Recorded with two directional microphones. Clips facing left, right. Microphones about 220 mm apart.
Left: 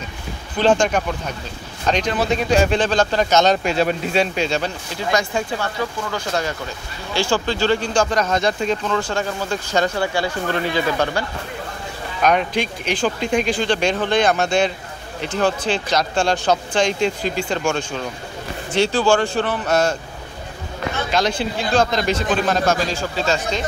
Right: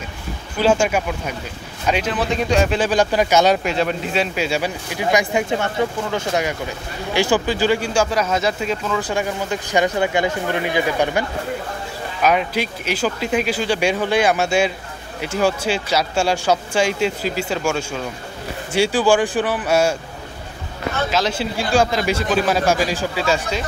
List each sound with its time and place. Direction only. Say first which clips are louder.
0.6 s speech: even; 10° right (ahead or behind)
9.1 s speech: right 1 dB; 15° right (ahead or behind)
21.1 s speech: left 4 dB; 5° right (ahead or behind)